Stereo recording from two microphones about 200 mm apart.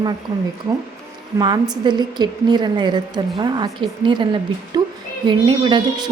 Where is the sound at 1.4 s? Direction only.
20° right (ahead or behind).